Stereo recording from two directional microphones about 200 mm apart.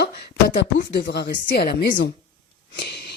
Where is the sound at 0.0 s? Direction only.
55° left (ahead or behind).